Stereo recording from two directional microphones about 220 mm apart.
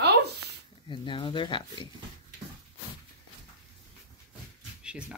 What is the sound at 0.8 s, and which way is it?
Speech, 20° left (ahead or behind).